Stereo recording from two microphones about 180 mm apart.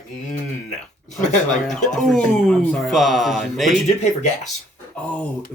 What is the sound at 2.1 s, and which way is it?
Speech, centre (ahead or behind).